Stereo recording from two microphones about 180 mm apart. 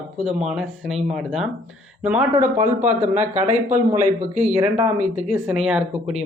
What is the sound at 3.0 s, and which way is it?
Speech, 40° right (ahead or behind).